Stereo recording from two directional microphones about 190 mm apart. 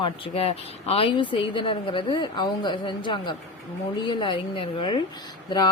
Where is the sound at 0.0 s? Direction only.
30° left (ahead or behind).